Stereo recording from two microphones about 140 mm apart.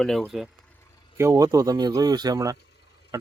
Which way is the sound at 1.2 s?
25° right (ahead or behind).